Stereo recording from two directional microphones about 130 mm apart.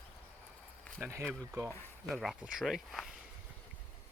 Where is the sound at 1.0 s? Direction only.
20° right (ahead or behind).